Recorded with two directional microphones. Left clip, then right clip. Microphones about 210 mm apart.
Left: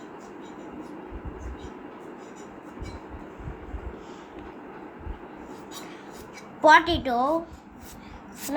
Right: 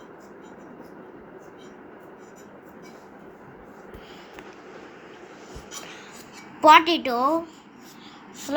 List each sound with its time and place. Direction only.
6.6 s a woman's voice: 15° right (ahead or behind)